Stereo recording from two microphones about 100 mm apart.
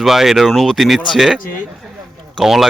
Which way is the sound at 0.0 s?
5° right (ahead or behind).